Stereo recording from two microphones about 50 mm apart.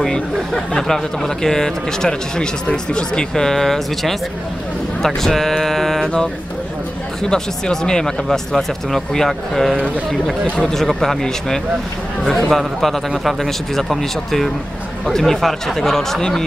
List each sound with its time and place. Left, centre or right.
0.0 s speech: centre
7.2 s speech: centre